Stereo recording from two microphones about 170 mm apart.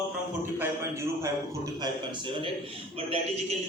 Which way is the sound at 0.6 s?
15° right (ahead or behind).